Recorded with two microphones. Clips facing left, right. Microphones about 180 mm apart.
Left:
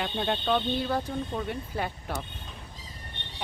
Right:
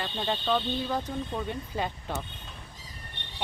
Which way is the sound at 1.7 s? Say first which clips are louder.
Right 1 dB; 15° right (ahead or behind).